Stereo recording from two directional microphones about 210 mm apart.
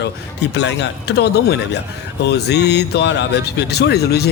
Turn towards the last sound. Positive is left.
turn(degrees=50)  # may be behind; listen again after turning